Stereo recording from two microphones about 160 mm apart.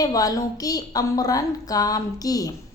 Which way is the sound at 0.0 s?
25° left (ahead or behind).